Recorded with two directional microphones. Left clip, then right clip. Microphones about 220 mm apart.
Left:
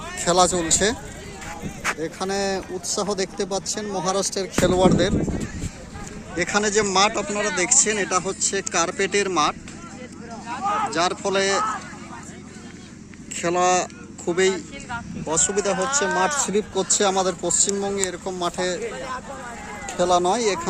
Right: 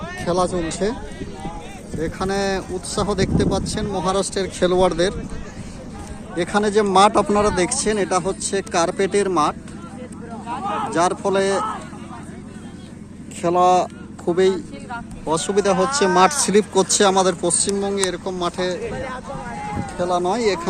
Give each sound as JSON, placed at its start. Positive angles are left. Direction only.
{"t": 0.2, "sound": "speech", "side_deg": 15}
{"t": 2.0, "sound": "speech", "side_deg": 5}
{"t": 6.3, "sound": "speech", "side_deg": 0}
{"t": 7.1, "sound": "speech", "side_deg": -20}
{"t": 10.9, "sound": "speech", "side_deg": -5}
{"t": 13.4, "sound": "speech", "side_deg": 0}
{"t": 18.9, "sound": "speech", "side_deg": 45}
{"t": 20.0, "sound": "speech", "side_deg": 25}
{"t": 20.3, "sound": "speech", "side_deg": 5}